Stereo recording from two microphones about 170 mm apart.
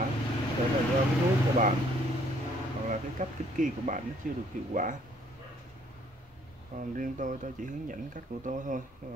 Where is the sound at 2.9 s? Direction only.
50° right (ahead or behind).